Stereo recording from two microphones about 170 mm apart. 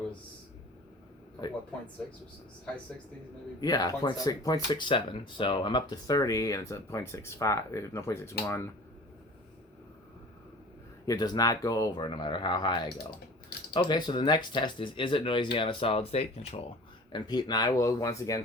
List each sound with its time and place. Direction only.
3.6 s speech: 20° left (ahead or behind)
11.0 s speech: 20° left (ahead or behind)
17.1 s speech: 25° left (ahead or behind)